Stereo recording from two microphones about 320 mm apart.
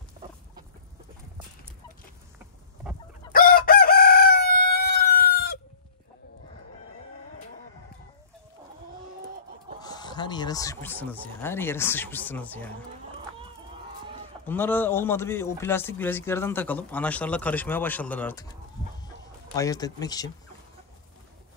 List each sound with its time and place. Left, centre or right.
3.3 s chicken: left
9.8 s speech: centre
14.4 s speech: centre
19.0 s chicken: centre